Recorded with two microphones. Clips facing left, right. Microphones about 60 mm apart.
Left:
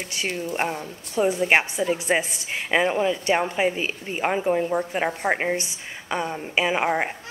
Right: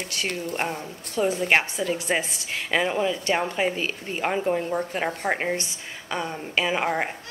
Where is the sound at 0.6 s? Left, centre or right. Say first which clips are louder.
Left 2 dB; centre.